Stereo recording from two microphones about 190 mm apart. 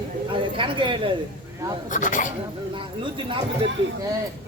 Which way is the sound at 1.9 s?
45° left (ahead or behind).